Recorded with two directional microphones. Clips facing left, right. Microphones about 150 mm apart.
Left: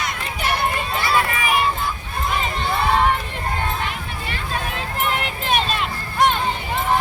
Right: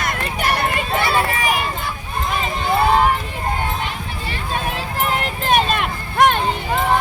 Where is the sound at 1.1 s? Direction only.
35° right (ahead or behind).